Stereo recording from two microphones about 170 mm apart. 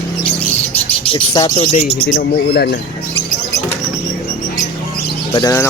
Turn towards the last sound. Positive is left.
turn(degrees=15)  # may be behind; listen again after turning